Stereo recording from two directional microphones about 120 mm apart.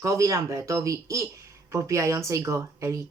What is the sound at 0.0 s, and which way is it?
Speech, 25° right (ahead or behind).